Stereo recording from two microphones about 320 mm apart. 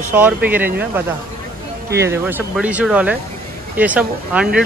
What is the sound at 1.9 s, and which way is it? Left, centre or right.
Speech, centre.